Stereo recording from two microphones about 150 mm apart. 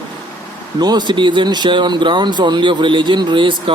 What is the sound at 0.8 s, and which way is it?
Speech, 30° right (ahead or behind).